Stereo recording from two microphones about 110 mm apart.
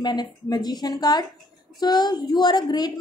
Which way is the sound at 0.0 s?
40° left (ahead or behind).